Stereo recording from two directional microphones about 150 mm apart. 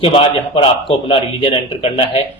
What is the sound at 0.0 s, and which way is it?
A man's voice, 35° left (ahead or behind).